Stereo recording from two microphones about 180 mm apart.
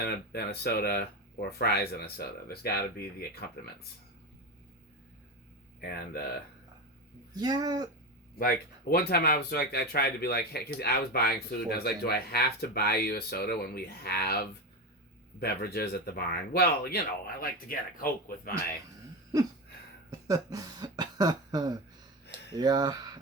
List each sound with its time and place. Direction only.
0.0 s speech: 60° left (ahead or behind)
5.8 s speech: 55° left (ahead or behind)
7.3 s speech: 20° right (ahead or behind)
8.4 s speech: 55° left (ahead or behind)
20.1 s cough: 20° right (ahead or behind)
22.5 s speech: 20° right (ahead or behind)